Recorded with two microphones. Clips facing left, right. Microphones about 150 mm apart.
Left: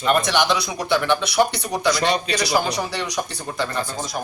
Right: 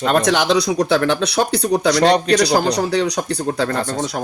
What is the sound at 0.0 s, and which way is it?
A man's voice, 90° right.